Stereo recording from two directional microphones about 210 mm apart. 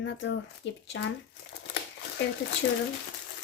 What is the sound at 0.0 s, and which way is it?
Speech, 60° left (ahead or behind).